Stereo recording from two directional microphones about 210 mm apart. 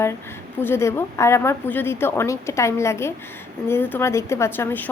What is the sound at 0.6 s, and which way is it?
A woman's voice, 10° left (ahead or behind).